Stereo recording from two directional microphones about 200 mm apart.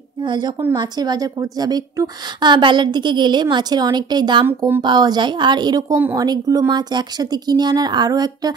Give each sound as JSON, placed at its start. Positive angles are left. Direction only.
{"t": 0.2, "sound": "speech", "side_deg": -20}
{"t": 4.5, "sound": "speech", "side_deg": -10}
{"t": 4.8, "sound": "speech", "side_deg": -20}